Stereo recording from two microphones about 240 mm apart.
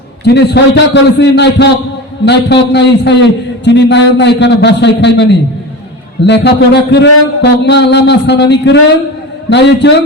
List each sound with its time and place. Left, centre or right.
0.3 s a man's voice: left